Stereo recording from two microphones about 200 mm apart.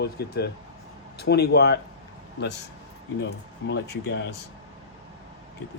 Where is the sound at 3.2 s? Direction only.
55° left (ahead or behind).